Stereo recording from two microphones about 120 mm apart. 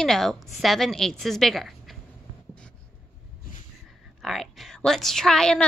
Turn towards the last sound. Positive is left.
turn(degrees=5)  # may be behind; listen again after turning